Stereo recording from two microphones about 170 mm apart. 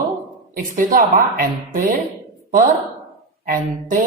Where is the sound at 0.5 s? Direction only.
55° right (ahead or behind).